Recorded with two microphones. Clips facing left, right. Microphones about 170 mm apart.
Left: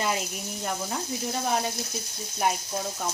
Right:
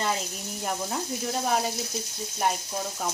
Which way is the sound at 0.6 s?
Centre (ahead or behind).